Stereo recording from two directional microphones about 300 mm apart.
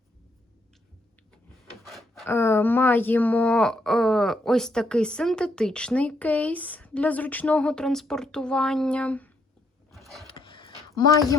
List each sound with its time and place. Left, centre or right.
1.8 s speech: centre
9.9 s vehicle: centre
10.2 s a sound: centre